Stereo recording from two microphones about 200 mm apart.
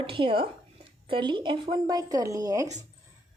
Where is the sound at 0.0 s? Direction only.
25° right (ahead or behind).